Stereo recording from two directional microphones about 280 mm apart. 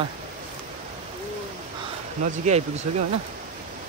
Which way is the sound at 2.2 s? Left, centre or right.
Right.